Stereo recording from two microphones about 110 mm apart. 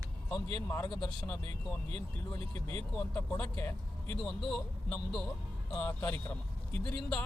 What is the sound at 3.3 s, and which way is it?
Speech, 20° left (ahead or behind).